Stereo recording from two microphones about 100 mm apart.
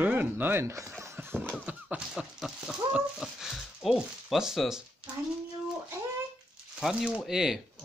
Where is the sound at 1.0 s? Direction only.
20° right (ahead or behind).